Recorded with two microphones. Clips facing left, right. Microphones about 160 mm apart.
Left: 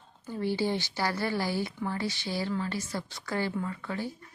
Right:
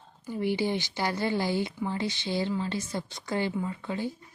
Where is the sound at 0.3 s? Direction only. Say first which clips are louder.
Right 1 dB; 15° right (ahead or behind).